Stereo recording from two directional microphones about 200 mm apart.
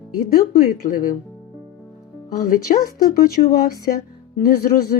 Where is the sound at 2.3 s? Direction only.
40° left (ahead or behind).